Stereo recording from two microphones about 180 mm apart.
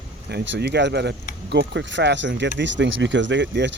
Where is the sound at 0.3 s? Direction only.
65° right (ahead or behind).